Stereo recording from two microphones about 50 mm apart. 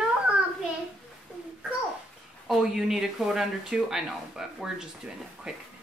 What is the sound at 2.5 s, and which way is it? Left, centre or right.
Speech, centre.